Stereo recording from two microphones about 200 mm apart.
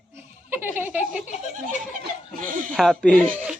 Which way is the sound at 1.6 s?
40° right (ahead or behind).